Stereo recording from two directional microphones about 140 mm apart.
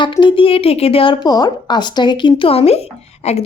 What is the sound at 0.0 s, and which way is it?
A woman's voice, 35° left (ahead or behind).